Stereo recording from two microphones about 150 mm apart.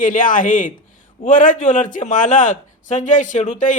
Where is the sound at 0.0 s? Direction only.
65° left (ahead or behind).